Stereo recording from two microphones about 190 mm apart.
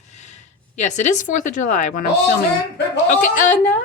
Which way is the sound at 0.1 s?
40° left (ahead or behind).